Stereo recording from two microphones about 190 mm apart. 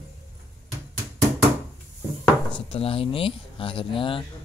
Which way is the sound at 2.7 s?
30° left (ahead or behind).